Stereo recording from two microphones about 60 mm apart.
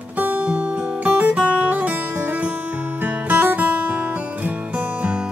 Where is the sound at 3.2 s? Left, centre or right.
Right.